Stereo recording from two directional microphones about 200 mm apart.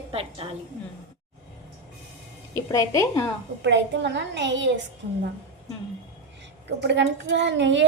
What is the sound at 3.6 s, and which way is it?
A woman's voice, 65° right (ahead or behind).